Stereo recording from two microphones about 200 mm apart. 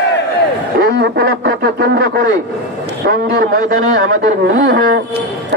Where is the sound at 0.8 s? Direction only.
50° right (ahead or behind).